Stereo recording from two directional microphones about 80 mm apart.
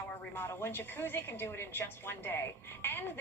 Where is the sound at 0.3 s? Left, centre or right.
Left.